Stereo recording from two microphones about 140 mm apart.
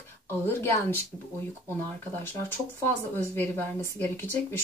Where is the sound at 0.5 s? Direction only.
15° left (ahead or behind).